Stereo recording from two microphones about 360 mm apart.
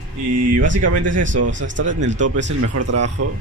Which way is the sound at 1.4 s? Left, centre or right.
Right.